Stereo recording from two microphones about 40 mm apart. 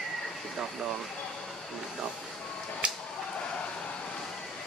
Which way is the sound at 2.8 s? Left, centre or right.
Right.